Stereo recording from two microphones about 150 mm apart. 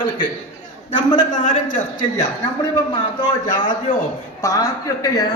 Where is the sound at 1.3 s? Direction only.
60° left (ahead or behind).